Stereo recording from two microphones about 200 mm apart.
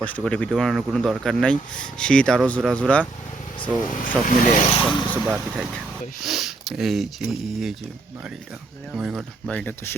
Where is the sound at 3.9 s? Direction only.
40° left (ahead or behind).